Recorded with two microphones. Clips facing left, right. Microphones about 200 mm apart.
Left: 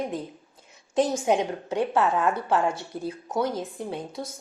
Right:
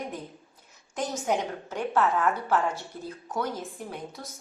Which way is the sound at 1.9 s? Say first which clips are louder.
Right 1 dB; 15° left (ahead or behind).